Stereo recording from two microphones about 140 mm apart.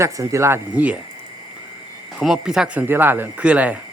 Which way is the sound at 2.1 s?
5° right (ahead or behind).